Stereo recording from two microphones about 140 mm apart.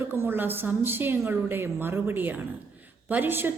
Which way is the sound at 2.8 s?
10° right (ahead or behind).